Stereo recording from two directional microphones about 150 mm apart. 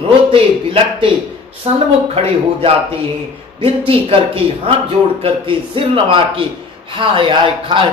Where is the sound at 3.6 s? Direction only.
40° right (ahead or behind).